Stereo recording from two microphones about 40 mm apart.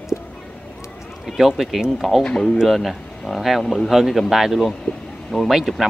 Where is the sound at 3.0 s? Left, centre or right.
Left.